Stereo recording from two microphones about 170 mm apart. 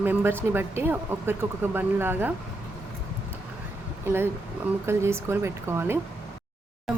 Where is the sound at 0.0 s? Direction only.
10° right (ahead or behind).